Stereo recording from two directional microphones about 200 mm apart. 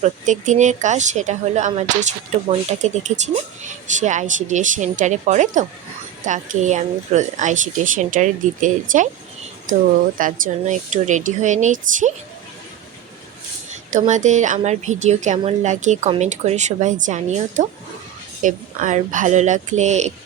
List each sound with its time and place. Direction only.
0.0 s a woman's voice: 35° right (ahead or behind)
14.1 s a woman's voice: 35° right (ahead or behind)